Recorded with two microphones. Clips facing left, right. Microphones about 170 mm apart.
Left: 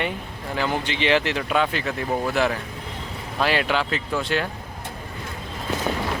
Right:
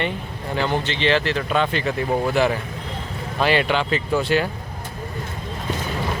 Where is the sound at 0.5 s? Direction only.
5° left (ahead or behind).